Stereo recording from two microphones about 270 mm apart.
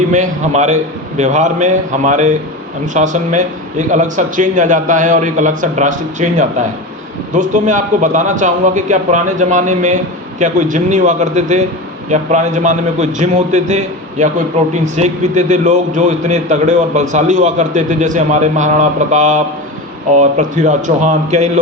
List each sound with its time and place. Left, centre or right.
0.1 s a man's voice: right